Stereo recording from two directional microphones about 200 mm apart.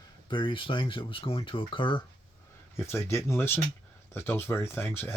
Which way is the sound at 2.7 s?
10° left (ahead or behind).